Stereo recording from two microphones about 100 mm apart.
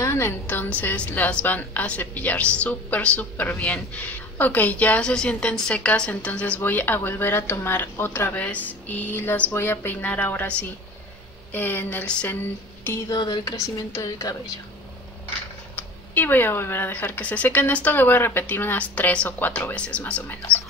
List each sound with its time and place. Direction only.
0.0 s a woman's voice: 25° left (ahead or behind)
13.1 s speech: 45° left (ahead or behind)
15.7 s a woman's voice: 20° left (ahead or behind)